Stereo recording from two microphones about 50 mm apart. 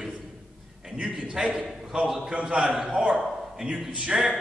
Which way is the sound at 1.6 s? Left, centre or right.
Centre.